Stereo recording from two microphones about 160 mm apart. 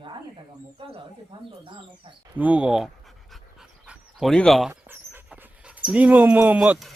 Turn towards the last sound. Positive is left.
turn(degrees=-5)  # may be behind; listen again after turning